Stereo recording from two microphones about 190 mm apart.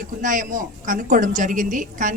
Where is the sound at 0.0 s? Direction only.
45° right (ahead or behind).